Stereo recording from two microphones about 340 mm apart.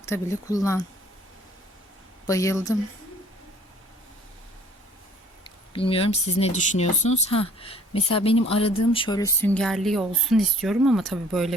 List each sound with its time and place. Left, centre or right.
0.0 s speech: centre
2.2 s speech: centre
5.7 s speech: centre